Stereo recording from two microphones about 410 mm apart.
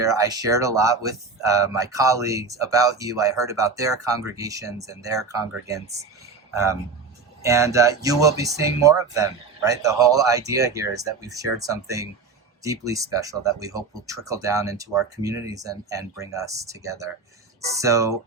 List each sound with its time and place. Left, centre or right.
0.0 s a man's voice: centre